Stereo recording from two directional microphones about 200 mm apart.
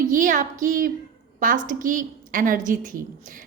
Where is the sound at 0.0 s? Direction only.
40° right (ahead or behind).